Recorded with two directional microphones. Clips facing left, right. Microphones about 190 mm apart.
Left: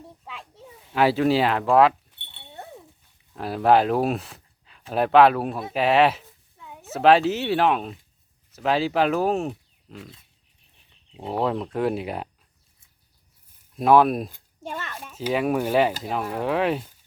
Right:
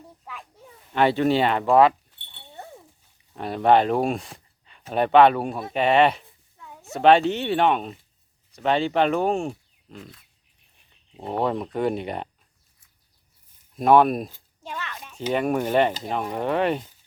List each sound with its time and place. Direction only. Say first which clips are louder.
0.3 s children playing: right 1 dB; 25° left (ahead or behind)
0.7 s speech: even; 5° left (ahead or behind)
3.3 s speech: even; centre (ahead or behind)
11.2 s speech: even; centre (ahead or behind)
13.7 s speech: even; centre (ahead or behind)
14.6 s a child's voice: left 1 dB; 45° left (ahead or behind)
15.1 s speech: even; 5° left (ahead or behind)